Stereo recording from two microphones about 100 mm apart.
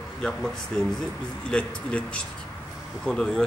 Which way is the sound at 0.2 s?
5° left (ahead or behind).